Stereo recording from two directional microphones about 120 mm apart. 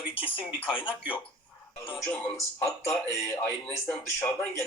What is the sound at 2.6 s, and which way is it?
Speech, 25° left (ahead or behind).